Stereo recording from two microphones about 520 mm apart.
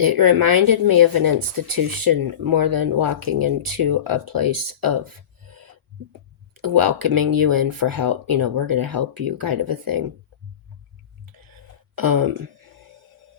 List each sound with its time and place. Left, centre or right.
0.0 s speech: right
6.6 s speech: right
11.9 s speech: right